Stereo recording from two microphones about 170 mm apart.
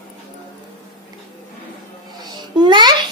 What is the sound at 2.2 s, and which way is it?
Babbling, 25° right (ahead or behind).